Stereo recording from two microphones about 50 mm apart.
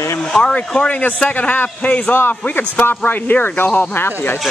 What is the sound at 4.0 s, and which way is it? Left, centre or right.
Speech, left.